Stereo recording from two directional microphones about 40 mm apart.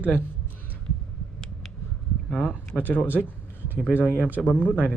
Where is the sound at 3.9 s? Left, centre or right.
Left.